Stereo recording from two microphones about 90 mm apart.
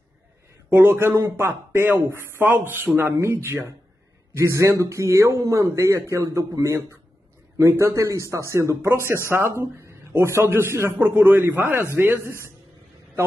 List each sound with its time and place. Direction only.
0.7 s a man's voice: 25° right (ahead or behind)